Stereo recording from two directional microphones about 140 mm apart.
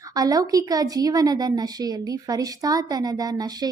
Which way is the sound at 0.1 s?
25° right (ahead or behind).